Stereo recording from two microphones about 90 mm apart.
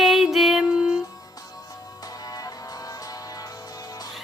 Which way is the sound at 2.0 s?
45° left (ahead or behind).